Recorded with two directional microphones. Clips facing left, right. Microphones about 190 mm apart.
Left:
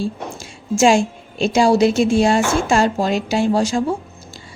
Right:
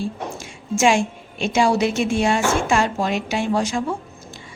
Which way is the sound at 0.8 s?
35° left (ahead or behind).